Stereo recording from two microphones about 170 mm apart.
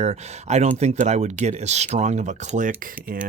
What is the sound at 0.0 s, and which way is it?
Speech, 40° right (ahead or behind).